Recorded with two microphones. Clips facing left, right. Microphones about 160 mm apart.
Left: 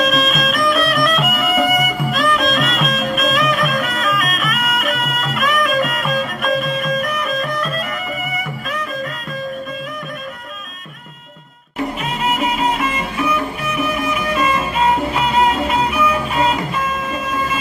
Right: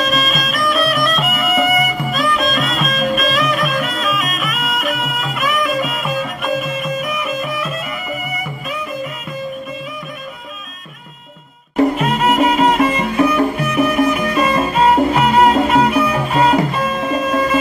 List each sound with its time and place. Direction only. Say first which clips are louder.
0.0 s music: left 2 dB; centre (ahead or behind)
11.7 s music: right 8 dB; 40° right (ahead or behind)